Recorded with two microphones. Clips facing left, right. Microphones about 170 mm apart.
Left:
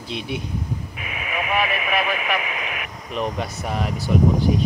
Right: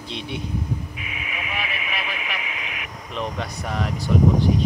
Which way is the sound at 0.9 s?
55° left (ahead or behind).